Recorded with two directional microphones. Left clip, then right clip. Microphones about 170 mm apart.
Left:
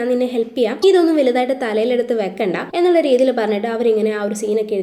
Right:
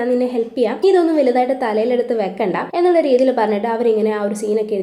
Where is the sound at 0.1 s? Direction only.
Centre (ahead or behind).